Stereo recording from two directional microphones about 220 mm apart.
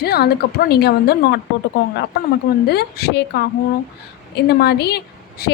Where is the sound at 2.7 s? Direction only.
45° left (ahead or behind).